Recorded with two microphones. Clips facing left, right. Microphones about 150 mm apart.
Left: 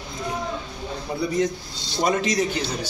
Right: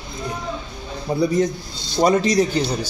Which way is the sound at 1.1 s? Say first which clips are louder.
Right 5 dB; 40° right (ahead or behind).